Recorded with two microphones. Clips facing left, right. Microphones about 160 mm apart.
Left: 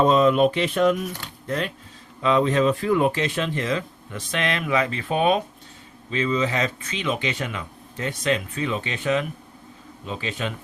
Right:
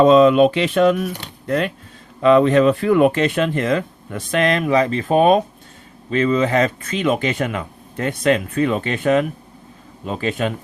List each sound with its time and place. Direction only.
0.0 s speech: 90° right
1.5 s speech: 60° right (ahead or behind); by 5.4 s 45° right (ahead or behind)
6.1 s speech: 55° right (ahead or behind)